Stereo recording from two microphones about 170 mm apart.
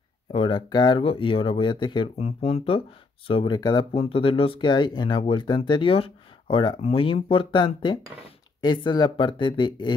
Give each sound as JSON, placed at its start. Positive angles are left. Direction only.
{"t": 0.3, "sound": "speech", "side_deg": 30}